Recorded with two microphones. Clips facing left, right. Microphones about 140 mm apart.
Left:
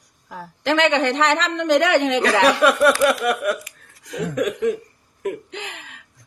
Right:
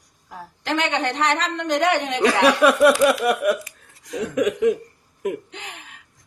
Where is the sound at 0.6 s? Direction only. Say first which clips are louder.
Left 5 dB; 90° left.